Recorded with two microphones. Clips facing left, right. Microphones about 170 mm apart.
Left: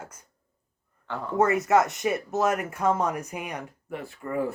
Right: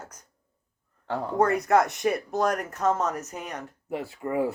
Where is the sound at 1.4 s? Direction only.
Centre (ahead or behind).